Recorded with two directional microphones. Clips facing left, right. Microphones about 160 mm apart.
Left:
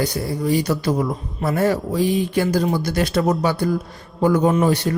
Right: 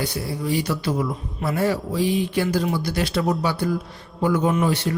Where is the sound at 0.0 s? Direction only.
45° left (ahead or behind).